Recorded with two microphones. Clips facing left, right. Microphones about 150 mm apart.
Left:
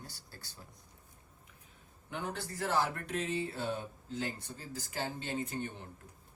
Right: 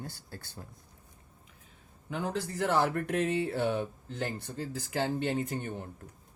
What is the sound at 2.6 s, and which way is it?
Speech, 60° right (ahead or behind).